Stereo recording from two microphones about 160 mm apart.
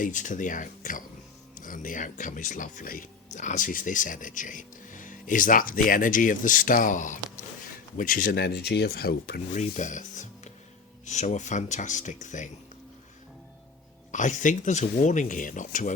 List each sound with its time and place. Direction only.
0.0 s speech: 55° left (ahead or behind); by 9.4 s 75° left (ahead or behind)
9.6 s speech: 50° left (ahead or behind)
14.1 s speech: 50° left (ahead or behind)